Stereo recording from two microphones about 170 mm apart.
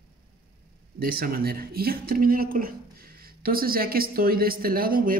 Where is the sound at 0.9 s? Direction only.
60° right (ahead or behind).